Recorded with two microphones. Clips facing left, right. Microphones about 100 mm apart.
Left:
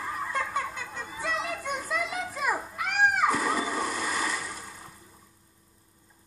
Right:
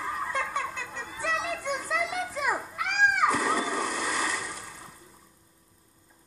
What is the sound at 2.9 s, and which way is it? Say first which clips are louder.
Splash: even; 5° left (ahead or behind).